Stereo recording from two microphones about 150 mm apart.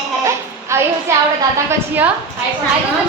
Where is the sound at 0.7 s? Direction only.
20° right (ahead or behind).